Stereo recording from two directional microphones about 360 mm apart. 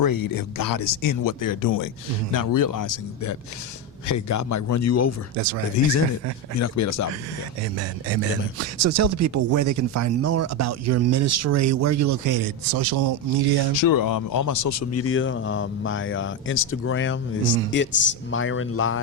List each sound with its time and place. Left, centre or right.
0.0 s speech: left
7.6 s speech: right
13.7 s a man's voice: left